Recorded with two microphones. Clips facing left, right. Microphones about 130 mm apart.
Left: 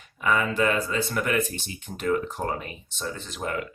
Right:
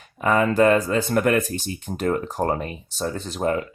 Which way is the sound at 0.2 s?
40° right (ahead or behind).